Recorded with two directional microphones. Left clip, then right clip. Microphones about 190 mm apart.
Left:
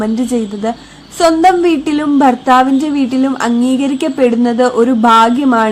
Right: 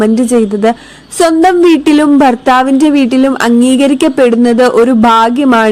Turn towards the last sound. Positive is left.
turn(degrees=-40)  # may be behind; listen again after turning